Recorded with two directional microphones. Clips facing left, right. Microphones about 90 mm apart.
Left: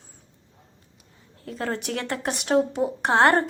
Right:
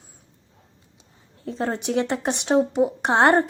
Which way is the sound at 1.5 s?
20° right (ahead or behind).